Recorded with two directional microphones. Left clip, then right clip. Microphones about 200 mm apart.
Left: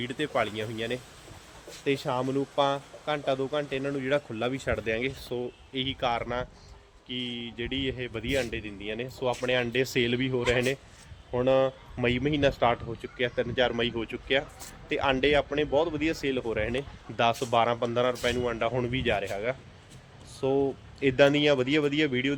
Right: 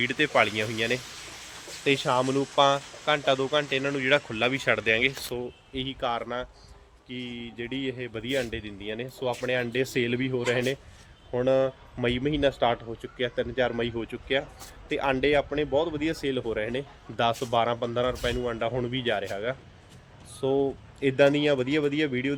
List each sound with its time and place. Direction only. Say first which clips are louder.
0.0 s a man's voice: right 6 dB; 15° right (ahead or behind); by 22.4 s 15° left (ahead or behind)